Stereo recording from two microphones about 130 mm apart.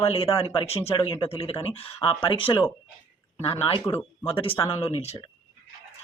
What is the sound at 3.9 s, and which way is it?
Speech, 30° left (ahead or behind).